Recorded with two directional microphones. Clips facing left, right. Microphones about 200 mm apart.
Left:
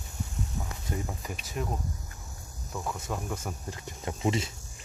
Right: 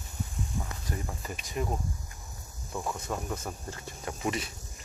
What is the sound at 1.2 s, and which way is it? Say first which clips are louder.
Speech: even; 10° left (ahead or behind).